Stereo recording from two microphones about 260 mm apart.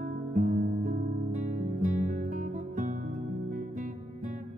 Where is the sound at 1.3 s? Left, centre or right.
Right.